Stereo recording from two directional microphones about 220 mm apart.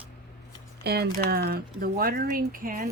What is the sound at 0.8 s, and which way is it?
Speech, 45° right (ahead or behind).